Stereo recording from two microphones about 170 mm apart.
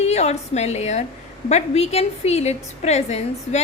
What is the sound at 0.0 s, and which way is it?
A woman's voice, 40° left (ahead or behind).